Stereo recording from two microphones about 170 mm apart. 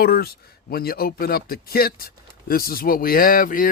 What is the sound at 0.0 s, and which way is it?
Speech, 60° left (ahead or behind).